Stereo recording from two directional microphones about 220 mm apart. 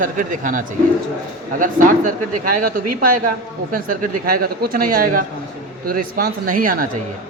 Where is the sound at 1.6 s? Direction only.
35° right (ahead or behind).